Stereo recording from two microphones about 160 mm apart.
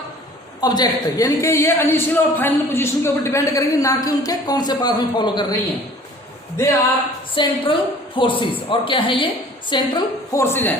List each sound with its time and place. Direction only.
0.6 s a man's voice: 25° left (ahead or behind)
7.3 s a woman's voice: 30° left (ahead or behind)
10.4 s a man's voice: 15° left (ahead or behind)